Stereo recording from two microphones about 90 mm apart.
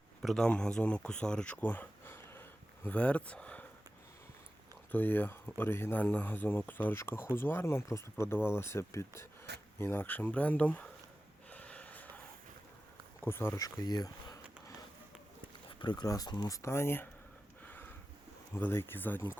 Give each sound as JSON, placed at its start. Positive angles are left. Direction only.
{"t": 0.2, "sound": "speech", "side_deg": 5}
{"t": 1.6, "sound": "a sound", "side_deg": 20}
{"t": 4.9, "sound": "speech", "side_deg": 20}
{"t": 11.5, "sound": "gasp", "side_deg": 15}
{"t": 13.2, "sound": "speech", "side_deg": 25}
{"t": 13.6, "sound": "speech", "side_deg": 40}
{"t": 15.8, "sound": "speech", "side_deg": 55}
{"t": 16.0, "sound": "speech", "side_deg": 45}
{"t": 16.5, "sound": "speech", "side_deg": 35}
{"t": 17.6, "sound": "a sound", "side_deg": 20}
{"t": 18.5, "sound": "speech", "side_deg": 25}